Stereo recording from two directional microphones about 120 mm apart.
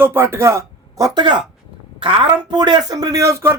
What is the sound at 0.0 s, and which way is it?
Speech, 20° right (ahead or behind).